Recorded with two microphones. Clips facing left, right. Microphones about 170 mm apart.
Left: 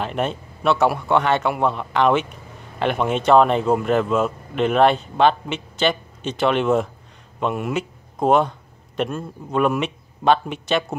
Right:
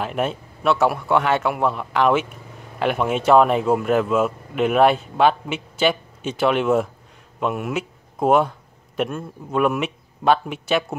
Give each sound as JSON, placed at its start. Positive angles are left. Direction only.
{"t": 0.0, "sound": "speech", "side_deg": -5}